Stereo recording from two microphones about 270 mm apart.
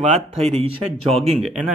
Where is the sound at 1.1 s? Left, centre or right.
Centre.